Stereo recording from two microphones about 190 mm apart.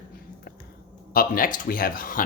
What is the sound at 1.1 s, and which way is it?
Speech, 50° left (ahead or behind).